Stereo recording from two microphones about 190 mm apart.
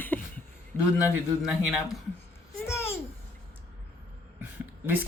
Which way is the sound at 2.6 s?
15° left (ahead or behind).